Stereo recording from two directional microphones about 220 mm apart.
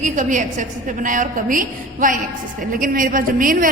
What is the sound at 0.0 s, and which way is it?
A woman's voice, 35° right (ahead or behind).